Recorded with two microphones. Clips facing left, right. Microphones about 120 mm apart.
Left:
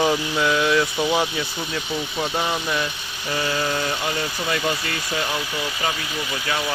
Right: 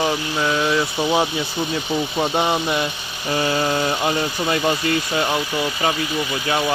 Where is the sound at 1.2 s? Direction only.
25° right (ahead or behind).